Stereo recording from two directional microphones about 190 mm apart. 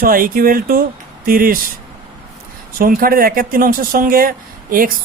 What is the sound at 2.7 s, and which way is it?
Speech, 50° right (ahead or behind).